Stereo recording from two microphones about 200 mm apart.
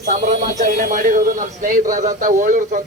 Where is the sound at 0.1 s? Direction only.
35° right (ahead or behind).